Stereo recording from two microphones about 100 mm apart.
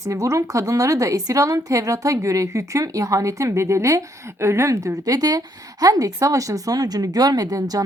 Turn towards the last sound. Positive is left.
turn(degrees=-40)  # may be behind; listen again after turning